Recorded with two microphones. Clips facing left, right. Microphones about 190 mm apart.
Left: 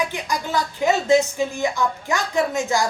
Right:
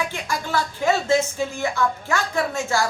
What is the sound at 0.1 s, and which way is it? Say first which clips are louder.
Speech: left 1 dB; 15° left (ahead or behind).